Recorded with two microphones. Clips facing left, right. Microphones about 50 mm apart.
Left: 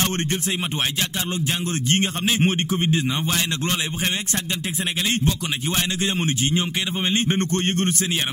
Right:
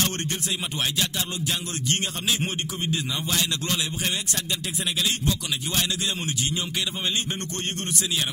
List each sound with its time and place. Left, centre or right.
1.4 s a man's voice: left
6.1 s a man's voice: left